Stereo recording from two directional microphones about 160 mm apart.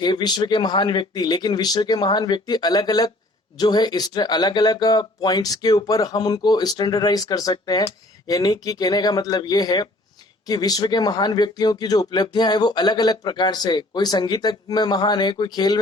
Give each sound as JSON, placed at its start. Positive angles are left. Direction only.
{"t": 0.0, "sound": "speech", "side_deg": 25}